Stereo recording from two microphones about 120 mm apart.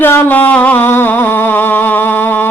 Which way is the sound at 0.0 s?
15° left (ahead or behind).